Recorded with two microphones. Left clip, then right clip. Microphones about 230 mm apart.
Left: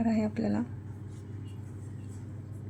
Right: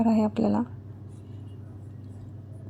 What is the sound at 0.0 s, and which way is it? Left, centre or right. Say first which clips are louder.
Speech: right 6 dB; centre.